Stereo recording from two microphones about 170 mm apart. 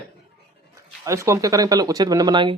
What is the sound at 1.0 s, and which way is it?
Speech, 15° right (ahead or behind).